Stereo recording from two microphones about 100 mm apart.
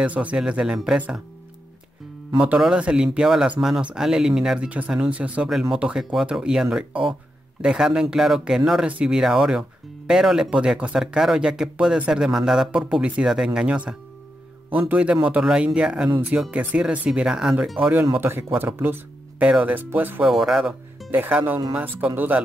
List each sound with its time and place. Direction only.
0.0 s speech: 15° right (ahead or behind)
2.3 s speech: 10° right (ahead or behind)
17.7 s speech: 20° right (ahead or behind)
20.2 s speech: 5° right (ahead or behind)
21.1 s speech: 20° right (ahead or behind)